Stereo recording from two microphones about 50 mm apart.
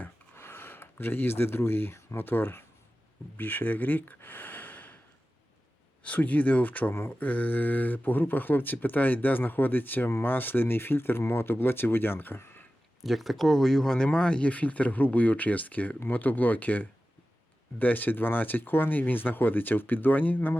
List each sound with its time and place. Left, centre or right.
0.3 s a sound: left
2.1 s speech: left
6.0 s speech: left
13.0 s speech: centre; by 20.6 s left